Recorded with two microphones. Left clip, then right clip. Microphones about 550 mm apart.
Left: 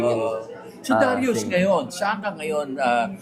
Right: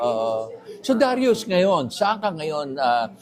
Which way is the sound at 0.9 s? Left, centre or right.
Right.